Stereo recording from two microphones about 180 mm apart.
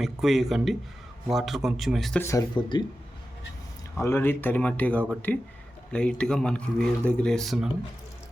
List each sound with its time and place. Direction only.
0.0 s a man's voice: centre (ahead or behind)
2.2 s speech: 20° left (ahead or behind)
3.9 s a man's voice: 15° left (ahead or behind)